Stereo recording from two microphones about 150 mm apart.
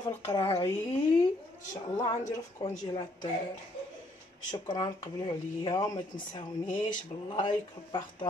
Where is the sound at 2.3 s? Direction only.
20° left (ahead or behind).